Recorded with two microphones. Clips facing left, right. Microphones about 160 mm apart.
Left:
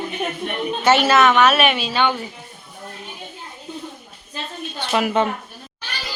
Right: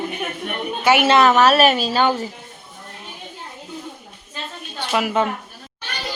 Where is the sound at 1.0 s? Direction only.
30° right (ahead or behind).